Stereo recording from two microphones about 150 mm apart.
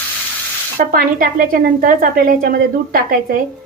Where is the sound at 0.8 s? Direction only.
75° right (ahead or behind).